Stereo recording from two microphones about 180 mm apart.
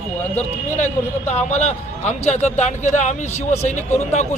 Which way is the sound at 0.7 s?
40° left (ahead or behind).